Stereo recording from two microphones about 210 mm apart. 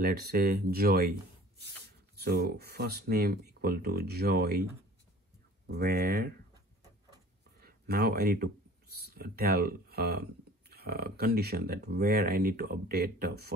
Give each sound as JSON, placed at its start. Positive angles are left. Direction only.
{"t": 0.0, "sound": "speech", "side_deg": -45}
{"t": 2.1, "sound": "speech", "side_deg": -50}
{"t": 5.7, "sound": "speech", "side_deg": -50}
{"t": 7.6, "sound": "speech", "side_deg": -45}